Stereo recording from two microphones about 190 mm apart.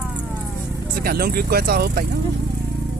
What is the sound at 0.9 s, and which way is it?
Speech, 55° right (ahead or behind).